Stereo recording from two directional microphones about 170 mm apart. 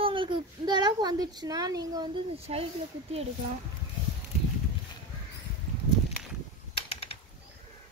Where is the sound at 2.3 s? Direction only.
35° right (ahead or behind).